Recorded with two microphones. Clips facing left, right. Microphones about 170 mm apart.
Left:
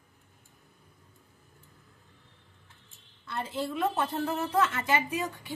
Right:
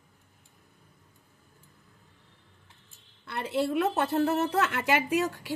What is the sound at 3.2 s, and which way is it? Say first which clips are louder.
A woman's voice: right 5 dB; 70° right (ahead or behind).